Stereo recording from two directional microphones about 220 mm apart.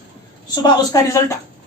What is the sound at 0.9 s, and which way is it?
Speech, 15° left (ahead or behind).